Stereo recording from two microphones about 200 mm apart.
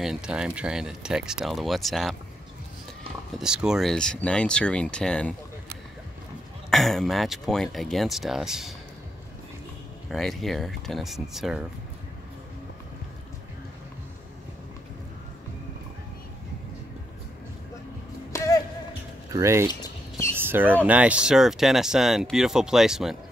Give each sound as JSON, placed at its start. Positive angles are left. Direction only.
{"t": 0.0, "sound": "speech", "side_deg": -5}
{"t": 3.3, "sound": "speech", "side_deg": -5}
{"t": 6.7, "sound": "speech", "side_deg": 0}
{"t": 10.0, "sound": "speech", "side_deg": 0}
{"t": 18.3, "sound": "basketball bounce", "side_deg": 15}
{"t": 19.3, "sound": "speech", "side_deg": -15}
{"t": 19.7, "sound": "a sound", "side_deg": 20}
{"t": 20.4, "sound": "speech", "side_deg": -10}